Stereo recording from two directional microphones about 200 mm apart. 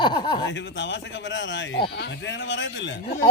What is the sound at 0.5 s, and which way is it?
A man's voice, 60° left (ahead or behind).